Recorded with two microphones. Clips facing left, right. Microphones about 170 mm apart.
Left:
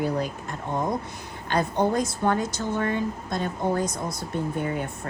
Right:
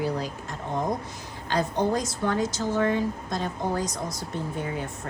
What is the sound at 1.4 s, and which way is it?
A woman's voice, 55° left (ahead or behind).